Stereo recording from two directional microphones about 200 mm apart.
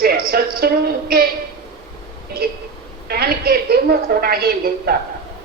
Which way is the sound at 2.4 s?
50° right (ahead or behind).